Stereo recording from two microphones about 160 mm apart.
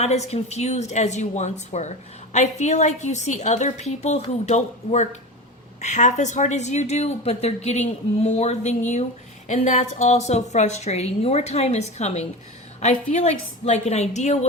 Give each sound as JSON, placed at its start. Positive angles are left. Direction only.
{"t": 0.0, "sound": "a woman's voice", "side_deg": 40}